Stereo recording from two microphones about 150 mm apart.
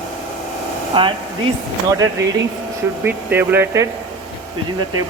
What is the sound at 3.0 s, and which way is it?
Speech, 10° right (ahead or behind).